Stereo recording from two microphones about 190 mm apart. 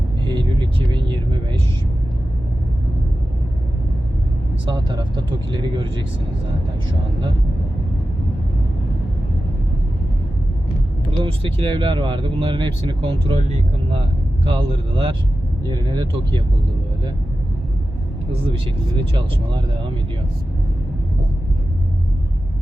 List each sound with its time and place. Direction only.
0.9 s vehicle: 25° right (ahead or behind)
4.6 s speech: 25° right (ahead or behind)
11.2 s speech: 30° right (ahead or behind)
14.4 s speech: 30° right (ahead or behind)
18.3 s speech: 30° right (ahead or behind)